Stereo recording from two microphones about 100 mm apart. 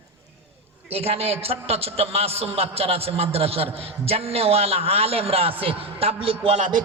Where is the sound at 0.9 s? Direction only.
90° right.